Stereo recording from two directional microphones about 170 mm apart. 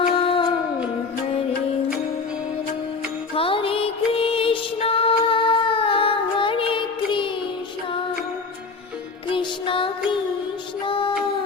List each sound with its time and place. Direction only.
0.2 s music: 30° left (ahead or behind)
3.3 s music: 30° left (ahead or behind)
9.3 s music: 30° left (ahead or behind)